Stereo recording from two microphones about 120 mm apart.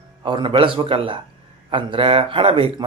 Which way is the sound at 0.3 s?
45° right (ahead or behind).